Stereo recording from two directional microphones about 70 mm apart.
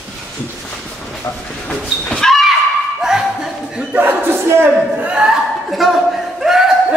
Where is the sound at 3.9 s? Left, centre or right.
Right.